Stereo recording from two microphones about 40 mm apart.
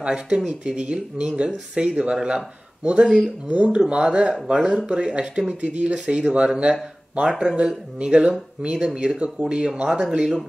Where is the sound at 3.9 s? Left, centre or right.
Right.